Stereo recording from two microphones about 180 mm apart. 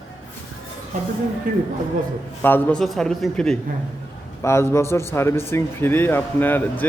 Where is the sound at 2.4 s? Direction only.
10° left (ahead or behind).